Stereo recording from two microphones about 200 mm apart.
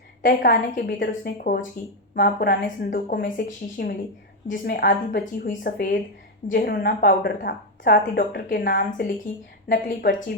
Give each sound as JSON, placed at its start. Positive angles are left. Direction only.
{"t": 0.2, "sound": "a woman's voice", "side_deg": 50}
{"t": 10.1, "sound": "a woman's voice", "side_deg": 65}